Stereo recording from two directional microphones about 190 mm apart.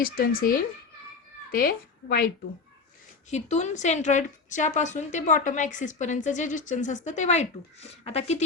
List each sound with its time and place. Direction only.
0.0 s a woman's voice: 50° left (ahead or behind)
3.2 s a woman's voice: 35° left (ahead or behind)